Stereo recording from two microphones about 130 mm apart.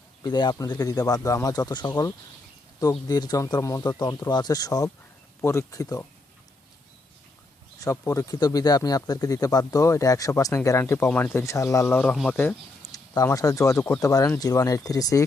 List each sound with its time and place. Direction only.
0.2 s speech: 35° left (ahead or behind)
3.1 s speech: 30° left (ahead or behind)
7.8 s speech: 25° left (ahead or behind)
12.1 s speech: centre (ahead or behind)
12.9 s speech: 25° left (ahead or behind)